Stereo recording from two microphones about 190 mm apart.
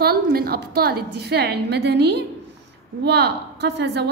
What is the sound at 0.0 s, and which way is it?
A woman's voice, 55° right (ahead or behind).